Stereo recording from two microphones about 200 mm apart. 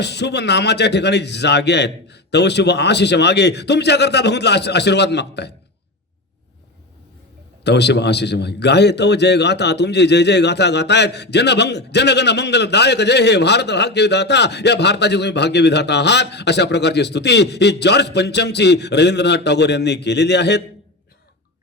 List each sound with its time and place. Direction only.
0.0 s a man's voice: 55° left (ahead or behind)
7.6 s a man's voice: 55° left (ahead or behind)